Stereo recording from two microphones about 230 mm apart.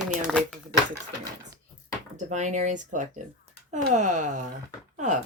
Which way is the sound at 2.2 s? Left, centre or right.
Right.